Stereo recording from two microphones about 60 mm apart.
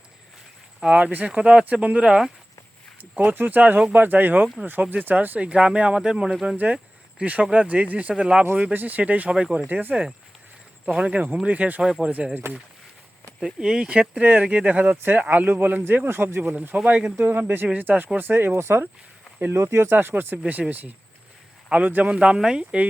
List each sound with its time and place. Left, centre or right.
0.9 s a man's voice: right
2.0 s a man's voice: centre
3.2 s speech: right; by 6.3 s centre
7.2 s a man's voice: right
8.7 s a man's voice: right
9.6 s speech: right
9.9 s a man's voice: centre
11.8 s a man's voice: centre
12.4 s speech: right
13.4 s speech: centre; by 16.6 s right
16.7 s speech: right
17.2 s speech: right; by 22.9 s centre